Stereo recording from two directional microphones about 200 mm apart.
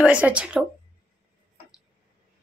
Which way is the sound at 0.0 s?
5° right (ahead or behind).